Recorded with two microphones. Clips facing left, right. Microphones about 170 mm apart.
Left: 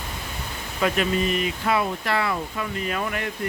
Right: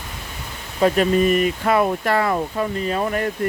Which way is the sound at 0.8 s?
45° right (ahead or behind).